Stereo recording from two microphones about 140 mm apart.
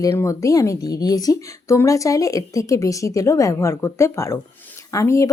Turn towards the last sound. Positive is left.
turn(degrees=20)  # may be behind; listen again after turning